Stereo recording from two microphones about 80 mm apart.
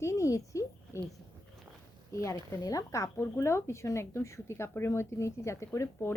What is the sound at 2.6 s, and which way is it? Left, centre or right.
Speech, left.